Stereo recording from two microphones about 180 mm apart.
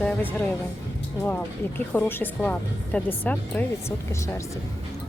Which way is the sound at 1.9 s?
10° left (ahead or behind).